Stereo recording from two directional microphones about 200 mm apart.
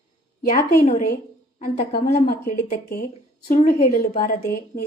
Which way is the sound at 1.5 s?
35° left (ahead or behind).